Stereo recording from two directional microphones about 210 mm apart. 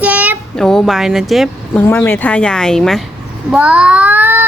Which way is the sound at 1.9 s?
10° left (ahead or behind).